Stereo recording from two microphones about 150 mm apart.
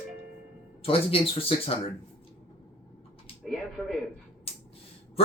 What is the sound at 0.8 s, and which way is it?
Speech, 40° left (ahead or behind).